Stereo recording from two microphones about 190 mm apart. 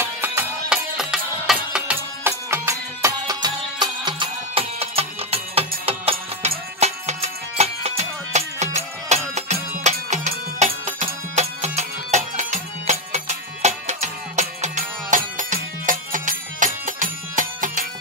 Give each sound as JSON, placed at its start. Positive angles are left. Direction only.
{"t": 0.0, "sound": "music", "side_deg": -10}